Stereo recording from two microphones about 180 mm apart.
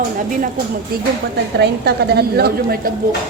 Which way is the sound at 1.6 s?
65° right (ahead or behind).